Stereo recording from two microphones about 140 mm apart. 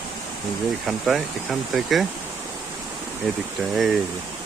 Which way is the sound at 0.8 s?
Centre (ahead or behind).